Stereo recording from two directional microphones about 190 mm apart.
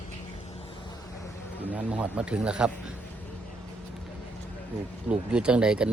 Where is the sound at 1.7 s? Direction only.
5° right (ahead or behind).